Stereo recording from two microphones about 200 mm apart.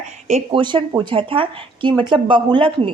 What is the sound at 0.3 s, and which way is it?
Speech, 30° right (ahead or behind).